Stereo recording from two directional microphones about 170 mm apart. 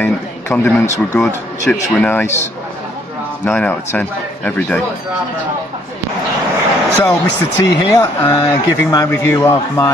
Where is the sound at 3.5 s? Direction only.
10° left (ahead or behind).